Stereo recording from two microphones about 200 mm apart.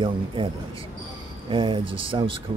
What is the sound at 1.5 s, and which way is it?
Speech, 25° right (ahead or behind).